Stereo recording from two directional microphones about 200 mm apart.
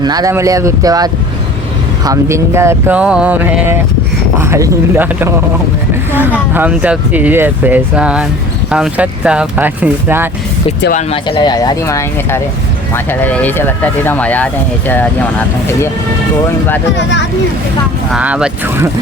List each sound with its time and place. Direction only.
0.0 s speech: 20° right (ahead or behind)
10.9 s speech: 25° left (ahead or behind); by 15.1 s 10° left (ahead or behind)
17.0 s speech: 60° left (ahead or behind)
18.1 s speech: 5° right (ahead or behind)